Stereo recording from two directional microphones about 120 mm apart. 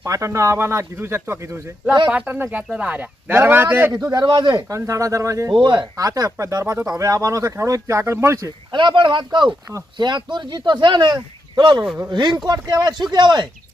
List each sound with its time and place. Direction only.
0.0 s speech: 25° right (ahead or behind)
2.0 s speech: 10° right (ahead or behind)
3.9 s speech: 35° right (ahead or behind)
4.7 s speech: 25° right (ahead or behind)
8.7 s speech: 40° right (ahead or behind)